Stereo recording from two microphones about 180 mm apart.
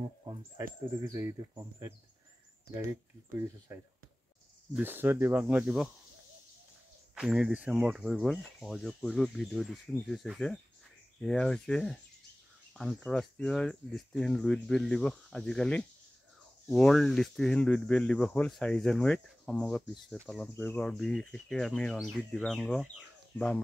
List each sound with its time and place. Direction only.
0.2 s speech: 20° right (ahead or behind)
3.7 s speech: 15° right (ahead or behind)
7.2 s speech: 5° right (ahead or behind)